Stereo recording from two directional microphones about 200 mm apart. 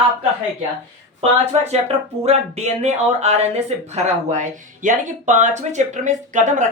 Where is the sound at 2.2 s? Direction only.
35° right (ahead or behind).